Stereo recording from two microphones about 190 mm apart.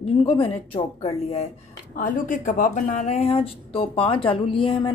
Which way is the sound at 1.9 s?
45° left (ahead or behind).